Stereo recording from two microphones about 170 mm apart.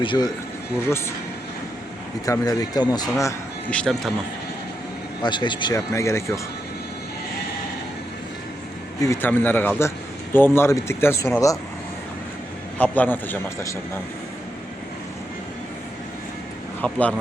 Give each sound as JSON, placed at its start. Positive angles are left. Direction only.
{"t": 0.0, "sound": "speech", "side_deg": 25}
{"t": 0.9, "sound": "speech", "side_deg": 15}
{"t": 2.2, "sound": "speech", "side_deg": 20}
{"t": 3.7, "sound": "speech", "side_deg": 5}
{"t": 5.2, "sound": "speech", "side_deg": 25}
{"t": 9.0, "sound": "speech", "side_deg": 15}
{"t": 12.8, "sound": "speech", "side_deg": 10}
{"t": 16.8, "sound": "speech", "side_deg": 5}